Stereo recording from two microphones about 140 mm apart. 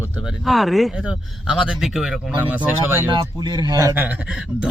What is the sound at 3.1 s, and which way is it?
A man's voice, 35° right (ahead or behind).